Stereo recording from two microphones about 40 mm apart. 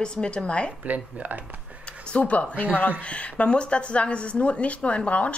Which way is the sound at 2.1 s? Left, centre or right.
Left.